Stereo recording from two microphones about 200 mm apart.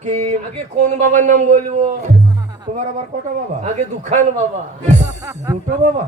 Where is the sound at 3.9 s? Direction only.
35° right (ahead or behind).